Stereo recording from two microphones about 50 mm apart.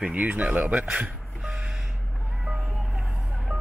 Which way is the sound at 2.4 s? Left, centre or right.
Centre.